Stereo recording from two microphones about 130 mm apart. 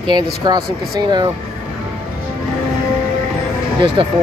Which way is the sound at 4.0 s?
40° right (ahead or behind).